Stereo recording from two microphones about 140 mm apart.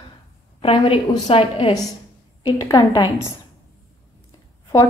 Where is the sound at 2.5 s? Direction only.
25° left (ahead or behind).